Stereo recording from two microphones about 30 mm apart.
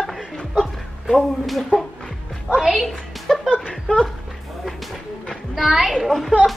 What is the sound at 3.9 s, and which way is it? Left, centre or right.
Speech, left.